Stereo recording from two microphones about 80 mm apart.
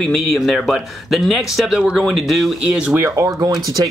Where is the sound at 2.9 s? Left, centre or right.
Right.